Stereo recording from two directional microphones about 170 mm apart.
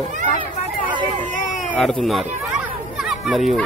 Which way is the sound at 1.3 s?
50° left (ahead or behind).